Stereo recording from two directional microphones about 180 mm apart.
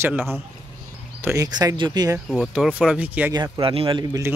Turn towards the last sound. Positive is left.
turn(degrees=-30)  # may be behind; listen again after turning